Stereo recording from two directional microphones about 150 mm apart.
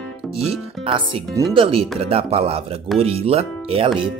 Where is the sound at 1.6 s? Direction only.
40° right (ahead or behind).